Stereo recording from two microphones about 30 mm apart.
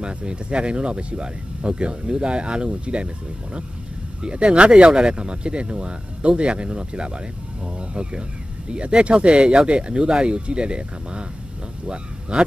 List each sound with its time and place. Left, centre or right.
0.0 s speech: right
4.2 s speech: right